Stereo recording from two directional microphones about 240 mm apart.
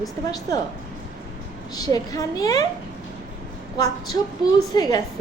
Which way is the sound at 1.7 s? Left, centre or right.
Centre.